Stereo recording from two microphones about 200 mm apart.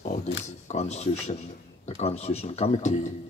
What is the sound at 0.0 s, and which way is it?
Speech, 35° left (ahead or behind).